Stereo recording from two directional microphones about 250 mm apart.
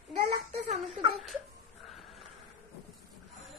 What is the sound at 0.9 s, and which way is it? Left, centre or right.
Whimper, centre.